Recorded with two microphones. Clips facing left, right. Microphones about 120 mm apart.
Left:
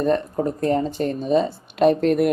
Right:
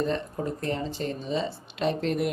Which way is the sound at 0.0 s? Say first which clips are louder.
Left 8 dB; 50° left (ahead or behind).